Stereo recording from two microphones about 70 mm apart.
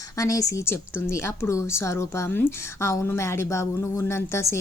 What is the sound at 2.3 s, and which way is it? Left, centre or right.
Speech, left.